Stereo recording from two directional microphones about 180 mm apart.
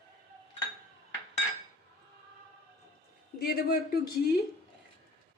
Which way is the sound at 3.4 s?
55° left (ahead or behind).